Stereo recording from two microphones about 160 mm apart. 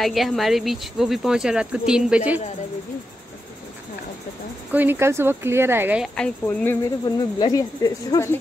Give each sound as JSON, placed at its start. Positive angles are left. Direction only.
{"t": 0.0, "sound": "speech", "side_deg": 0}
{"t": 4.7, "sound": "speech", "side_deg": -15}
{"t": 6.1, "sound": "speech", "side_deg": 10}
{"t": 7.1, "sound": "speech", "side_deg": 25}